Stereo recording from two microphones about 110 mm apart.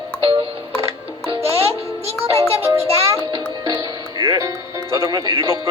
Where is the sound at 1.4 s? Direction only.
65° right (ahead or behind).